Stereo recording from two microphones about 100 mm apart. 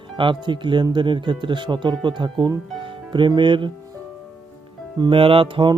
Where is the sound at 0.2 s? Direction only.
55° right (ahead or behind).